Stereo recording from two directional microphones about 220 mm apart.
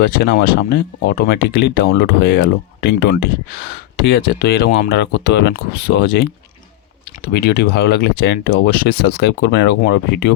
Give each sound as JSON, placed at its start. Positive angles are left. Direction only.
{"t": 0.0, "sound": "speech", "side_deg": 45}
{"t": 7.3, "sound": "speech", "side_deg": 45}